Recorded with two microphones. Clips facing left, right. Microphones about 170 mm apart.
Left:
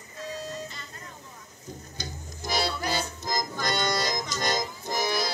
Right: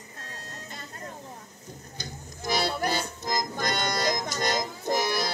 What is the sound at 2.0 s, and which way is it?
Music, 55° right (ahead or behind).